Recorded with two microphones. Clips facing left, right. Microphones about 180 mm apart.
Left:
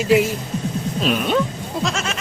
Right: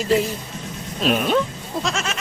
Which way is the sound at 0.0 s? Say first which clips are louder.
Left 3 dB; 5° left (ahead or behind).